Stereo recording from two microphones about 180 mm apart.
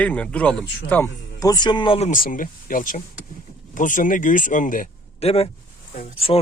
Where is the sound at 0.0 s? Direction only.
10° left (ahead or behind); by 2.0 s 30° left (ahead or behind).